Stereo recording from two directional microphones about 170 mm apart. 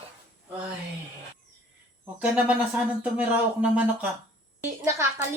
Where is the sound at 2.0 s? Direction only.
10° right (ahead or behind).